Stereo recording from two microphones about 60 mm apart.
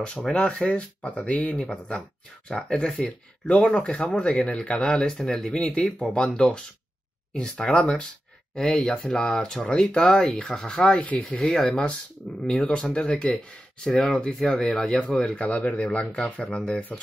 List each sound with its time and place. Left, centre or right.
0.0 s speech: centre
1.5 s speech: centre